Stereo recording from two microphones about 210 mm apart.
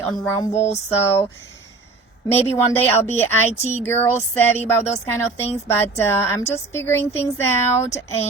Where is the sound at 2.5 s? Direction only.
10° left (ahead or behind).